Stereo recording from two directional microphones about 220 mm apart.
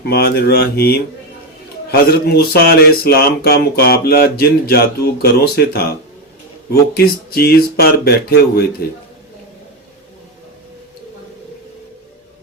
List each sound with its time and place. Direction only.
0.0 s speech: 45° left (ahead or behind)